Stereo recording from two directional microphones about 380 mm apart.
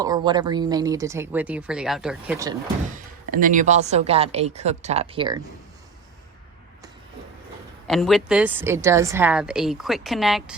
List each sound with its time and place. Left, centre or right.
0.0 s speech: centre
2.9 s speech: right
7.9 s a woman's voice: centre